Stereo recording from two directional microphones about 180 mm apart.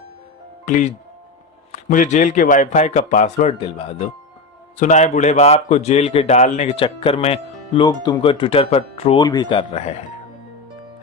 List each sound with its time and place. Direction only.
0.6 s a man's voice: 45° left (ahead or behind)